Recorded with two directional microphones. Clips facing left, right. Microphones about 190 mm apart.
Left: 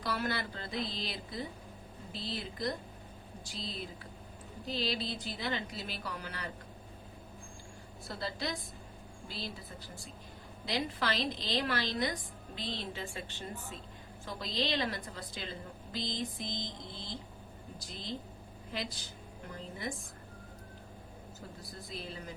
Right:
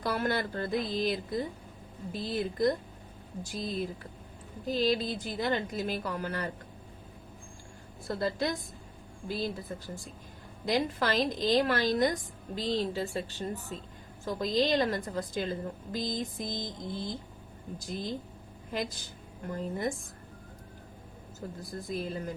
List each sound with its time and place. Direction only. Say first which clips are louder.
0.0 s a woman's voice: right 5 dB; 50° right (ahead or behind)
8.0 s a woman's voice: right 8 dB; 50° right (ahead or behind)
10.7 s a woman's voice: right 6 dB; 45° right (ahead or behind)
21.7 s a woman's voice: right 10 dB; 50° right (ahead or behind)